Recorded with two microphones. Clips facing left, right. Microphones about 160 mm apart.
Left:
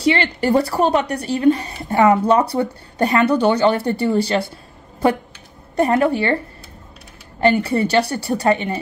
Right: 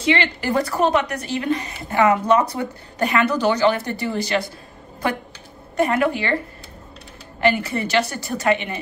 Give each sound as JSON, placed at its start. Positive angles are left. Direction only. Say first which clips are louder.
{"t": 0.0, "sound": "a woman's voice", "louder": "left 3 dB", "side_deg": 30}
{"t": 5.8, "sound": "a woman's voice", "louder": "left 3 dB", "side_deg": 35}
{"t": 7.3, "sound": "a woman's voice", "louder": "left 4 dB", "side_deg": 30}